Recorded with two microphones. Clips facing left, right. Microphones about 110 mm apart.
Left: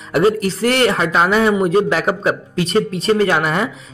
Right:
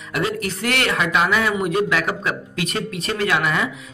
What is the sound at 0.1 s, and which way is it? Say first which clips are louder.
A man's voice: left 9 dB; 35° left (ahead or behind).